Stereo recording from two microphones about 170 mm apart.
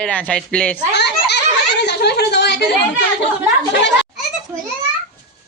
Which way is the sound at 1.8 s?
75° left (ahead or behind).